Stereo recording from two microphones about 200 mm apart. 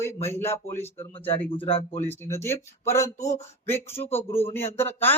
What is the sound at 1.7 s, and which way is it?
Speech, 30° left (ahead or behind).